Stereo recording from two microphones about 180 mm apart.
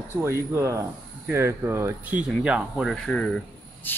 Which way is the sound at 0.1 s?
15° right (ahead or behind).